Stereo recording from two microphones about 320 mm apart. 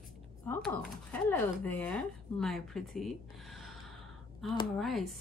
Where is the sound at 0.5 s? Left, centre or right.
Centre.